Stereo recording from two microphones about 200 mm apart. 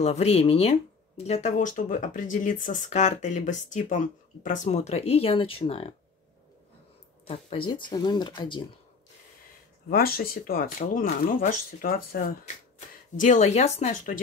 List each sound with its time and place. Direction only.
0.0 s speech: 30° left (ahead or behind)
7.2 s speech: 30° left (ahead or behind)
9.8 s speech: 50° left (ahead or behind)